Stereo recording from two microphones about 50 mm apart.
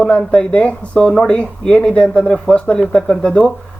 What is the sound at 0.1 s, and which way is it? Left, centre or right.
Speech, left.